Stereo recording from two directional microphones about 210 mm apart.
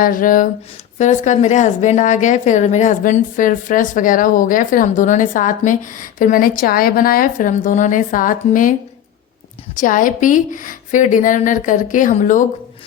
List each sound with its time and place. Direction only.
0.0 s a woman's voice: 40° left (ahead or behind)
9.7 s a woman's voice: 40° left (ahead or behind)